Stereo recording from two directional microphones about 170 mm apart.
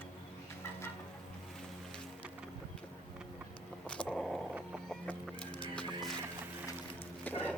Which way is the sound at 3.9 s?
5° left (ahead or behind).